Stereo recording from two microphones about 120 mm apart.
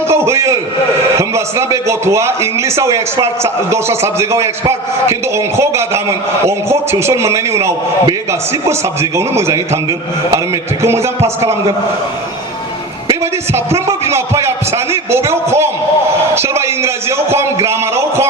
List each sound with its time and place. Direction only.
0.1 s a sound: 25° right (ahead or behind)
1.1 s a man's voice: 25° right (ahead or behind)
9.0 s a man's voice: 25° right (ahead or behind)
10.8 s a man's voice: 25° right (ahead or behind)
13.7 s a man's voice: 25° right (ahead or behind)